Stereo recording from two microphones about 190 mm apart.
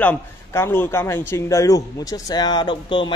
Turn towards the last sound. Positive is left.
turn(degrees=25)  # may be behind; listen again after turning